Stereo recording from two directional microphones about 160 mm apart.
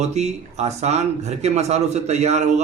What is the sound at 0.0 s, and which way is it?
A man's voice, 45° right (ahead or behind).